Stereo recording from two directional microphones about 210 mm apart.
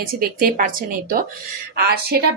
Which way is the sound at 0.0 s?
45° right (ahead or behind).